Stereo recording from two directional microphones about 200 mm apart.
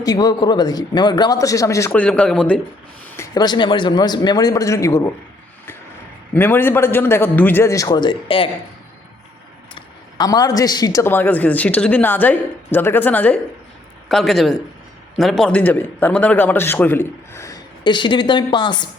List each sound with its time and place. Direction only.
0.0 s a man's voice: 20° left (ahead or behind)
3.1 s speech: 15° left (ahead or behind)
6.3 s a man's voice: 10° left (ahead or behind)
9.7 s a man's voice: 20° left (ahead or behind)